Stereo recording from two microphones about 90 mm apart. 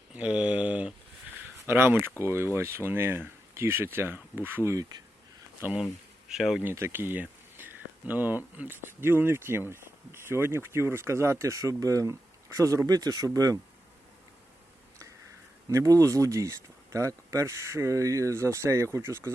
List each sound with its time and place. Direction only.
0.1 s a sound: 15° right (ahead or behind)
1.6 s speech: 25° right (ahead or behind)
5.8 s speech: 5° right (ahead or behind)
6.7 s speech: 25° right (ahead or behind)
15.7 s speech: 35° right (ahead or behind)